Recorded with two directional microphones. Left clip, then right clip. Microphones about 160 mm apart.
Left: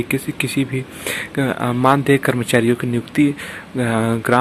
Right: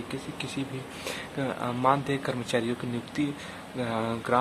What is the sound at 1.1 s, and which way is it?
Speech, 20° left (ahead or behind).